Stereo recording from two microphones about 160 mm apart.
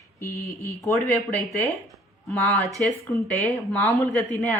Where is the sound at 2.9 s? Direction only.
Centre (ahead or behind).